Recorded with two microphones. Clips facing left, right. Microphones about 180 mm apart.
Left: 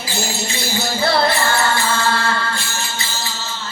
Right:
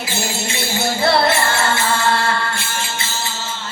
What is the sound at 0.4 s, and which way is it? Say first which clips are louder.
Music: right 2 dB; 25° right (ahead or behind).